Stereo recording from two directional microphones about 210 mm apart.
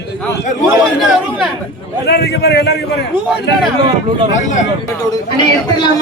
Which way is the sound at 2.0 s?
50° left (ahead or behind).